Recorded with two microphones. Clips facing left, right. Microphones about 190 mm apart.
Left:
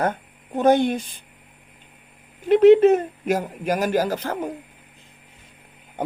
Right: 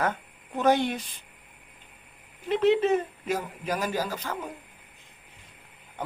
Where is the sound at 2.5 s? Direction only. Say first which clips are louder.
Left 10 dB; 50° left (ahead or behind).